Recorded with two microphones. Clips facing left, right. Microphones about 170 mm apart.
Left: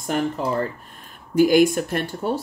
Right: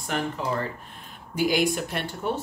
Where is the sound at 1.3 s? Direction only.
50° left (ahead or behind).